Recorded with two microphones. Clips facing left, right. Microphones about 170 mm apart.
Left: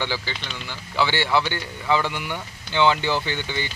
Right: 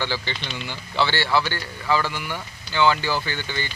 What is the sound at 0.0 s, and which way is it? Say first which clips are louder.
A man's voice: even; 15° left (ahead or behind).